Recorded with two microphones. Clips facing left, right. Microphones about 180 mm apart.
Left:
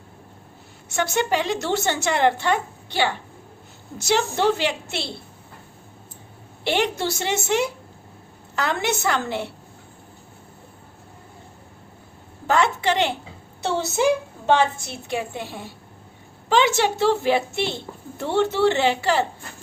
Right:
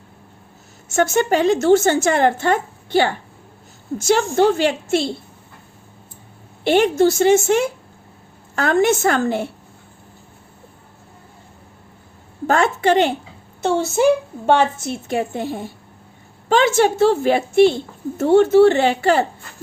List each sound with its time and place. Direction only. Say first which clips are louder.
0.9 s a woman's voice: right 6 dB; 45° right (ahead or behind)
6.7 s a woman's voice: right 9 dB; 50° right (ahead or behind)
12.5 s a woman's voice: right 4 dB; 50° right (ahead or behind)